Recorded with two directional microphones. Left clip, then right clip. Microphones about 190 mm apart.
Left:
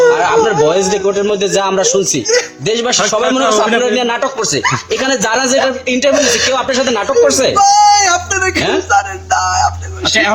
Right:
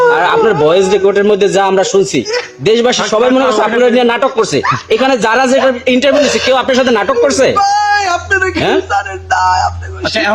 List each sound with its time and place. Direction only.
0.1 s a man's voice: 45° right (ahead or behind)
6.1 s speech: centre (ahead or behind)
6.5 s speech: 45° right (ahead or behind)
7.6 s speech: centre (ahead or behind)